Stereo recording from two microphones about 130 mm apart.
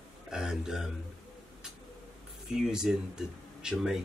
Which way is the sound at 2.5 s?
5° right (ahead or behind).